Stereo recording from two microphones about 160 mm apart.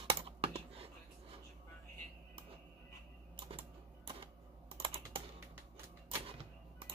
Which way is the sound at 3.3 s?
35° right (ahead or behind).